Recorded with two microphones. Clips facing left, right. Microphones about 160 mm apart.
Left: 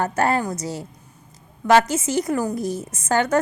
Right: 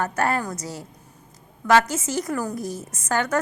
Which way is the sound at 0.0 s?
25° left (ahead or behind).